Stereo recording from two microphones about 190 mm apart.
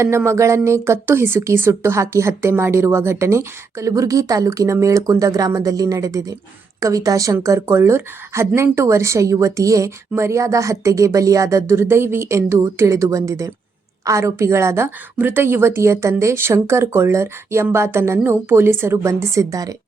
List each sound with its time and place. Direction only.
0.0 s speech: 15° right (ahead or behind)